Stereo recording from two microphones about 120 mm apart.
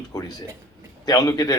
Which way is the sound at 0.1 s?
30° left (ahead or behind).